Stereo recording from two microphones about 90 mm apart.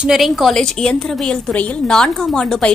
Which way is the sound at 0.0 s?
5° right (ahead or behind).